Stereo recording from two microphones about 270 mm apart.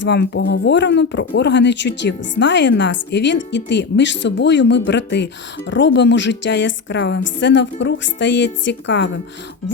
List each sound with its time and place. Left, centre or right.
0.0 s a woman's voice: left